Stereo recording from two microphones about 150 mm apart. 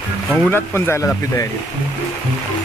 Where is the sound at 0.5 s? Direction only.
15° left (ahead or behind).